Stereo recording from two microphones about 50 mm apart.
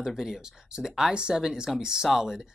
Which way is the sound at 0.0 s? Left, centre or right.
Centre.